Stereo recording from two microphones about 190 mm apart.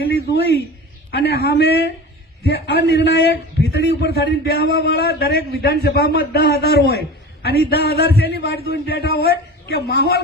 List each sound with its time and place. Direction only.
1.1 s a man's voice: 55° left (ahead or behind)